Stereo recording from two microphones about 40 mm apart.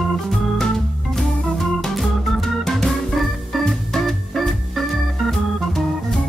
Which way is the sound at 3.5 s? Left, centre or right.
Centre.